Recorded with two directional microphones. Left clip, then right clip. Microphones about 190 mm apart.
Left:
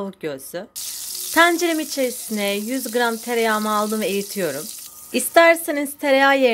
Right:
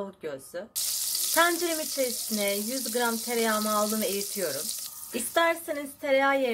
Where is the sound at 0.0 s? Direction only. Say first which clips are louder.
Left 7 dB; 40° left (ahead or behind).